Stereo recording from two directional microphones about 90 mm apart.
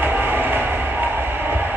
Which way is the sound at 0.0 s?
25° right (ahead or behind).